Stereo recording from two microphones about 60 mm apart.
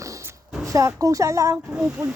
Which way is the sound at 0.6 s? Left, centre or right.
Right.